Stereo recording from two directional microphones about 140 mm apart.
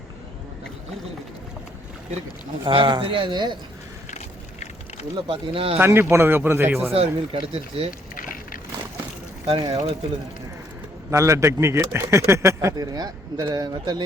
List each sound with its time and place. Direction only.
2.6 s speech: 35° right (ahead or behind)
5.3 s speech: 40° right (ahead or behind)
5.8 s speech: 20° right (ahead or behind)
6.9 s speech: 45° right (ahead or behind)
9.5 s speech: 45° right (ahead or behind)
11.1 s speech: 20° right (ahead or behind)